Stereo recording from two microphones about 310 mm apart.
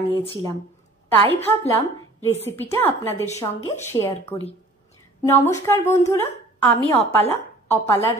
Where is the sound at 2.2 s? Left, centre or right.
Centre.